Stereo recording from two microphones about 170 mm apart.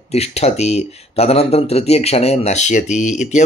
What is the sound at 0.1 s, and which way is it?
Speech, 40° left (ahead or behind).